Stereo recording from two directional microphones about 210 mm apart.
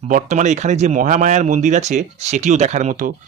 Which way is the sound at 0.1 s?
35° right (ahead or behind).